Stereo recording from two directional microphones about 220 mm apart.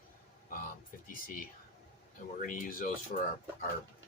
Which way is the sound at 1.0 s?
40° left (ahead or behind).